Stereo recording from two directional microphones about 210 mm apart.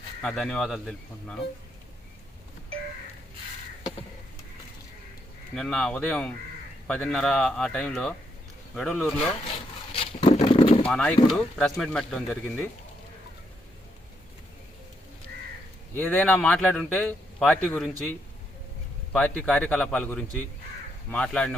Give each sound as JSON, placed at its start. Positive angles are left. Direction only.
{"t": 0.2, "sound": "speech", "side_deg": 5}
{"t": 5.5, "sound": "speech", "side_deg": 5}
{"t": 9.9, "sound": "a sound", "side_deg": 25}
{"t": 10.8, "sound": "speech", "side_deg": 5}
{"t": 16.0, "sound": "speech", "side_deg": 10}
{"t": 19.1, "sound": "speech", "side_deg": 5}